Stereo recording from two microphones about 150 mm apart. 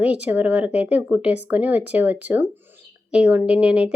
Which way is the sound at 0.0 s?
10° right (ahead or behind).